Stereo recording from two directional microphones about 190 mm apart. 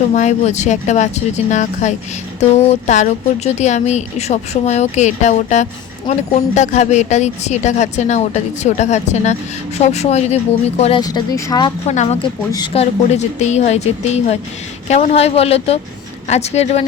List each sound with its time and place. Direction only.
0.1 s a woman's voice: 40° left (ahead or behind)
11.0 s speech: 20° left (ahead or behind)
11.9 s a woman's voice: 35° left (ahead or behind)
12.5 s speech: 20° left (ahead or behind)
12.7 s a woman's voice: 35° left (ahead or behind)